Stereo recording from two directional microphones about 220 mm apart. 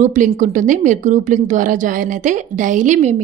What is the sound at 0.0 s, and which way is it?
A woman's voice, 35° right (ahead or behind).